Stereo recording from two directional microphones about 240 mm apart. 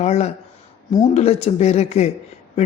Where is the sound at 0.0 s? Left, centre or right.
Left.